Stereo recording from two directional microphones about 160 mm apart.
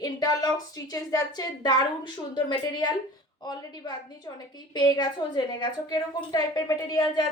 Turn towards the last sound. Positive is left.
turn(degrees=20)  # may be behind; listen again after turning